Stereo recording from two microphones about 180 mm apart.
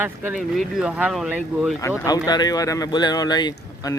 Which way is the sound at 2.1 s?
20° left (ahead or behind).